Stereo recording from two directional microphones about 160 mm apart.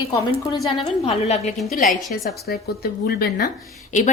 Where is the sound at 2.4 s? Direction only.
75° left (ahead or behind); by 4.1 s 50° left (ahead or behind).